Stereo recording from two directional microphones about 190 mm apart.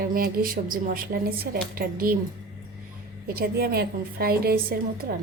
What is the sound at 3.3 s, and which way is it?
A woman's voice, 55° right (ahead or behind).